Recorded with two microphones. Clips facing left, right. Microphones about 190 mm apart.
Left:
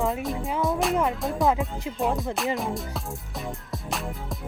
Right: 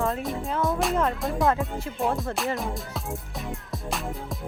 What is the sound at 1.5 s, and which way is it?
Speech, 15° left (ahead or behind).